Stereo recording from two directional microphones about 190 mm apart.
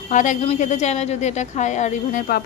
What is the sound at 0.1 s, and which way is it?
A woman's voice, 40° left (ahead or behind).